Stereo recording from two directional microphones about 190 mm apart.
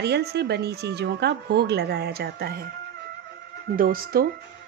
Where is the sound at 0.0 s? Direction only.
60° right (ahead or behind).